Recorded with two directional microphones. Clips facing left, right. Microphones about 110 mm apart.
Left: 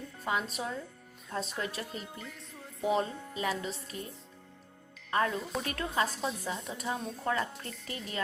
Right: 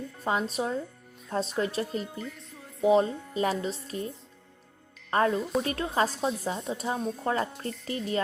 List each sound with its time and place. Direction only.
0.3 s speech: 30° right (ahead or behind)
2.0 s speech: centre (ahead or behind)
2.8 s speech: 25° right (ahead or behind)
3.3 s speech: 35° right (ahead or behind)
5.1 s speech: 35° right (ahead or behind)
5.4 s speech: centre (ahead or behind)
5.9 s speech: 35° right (ahead or behind)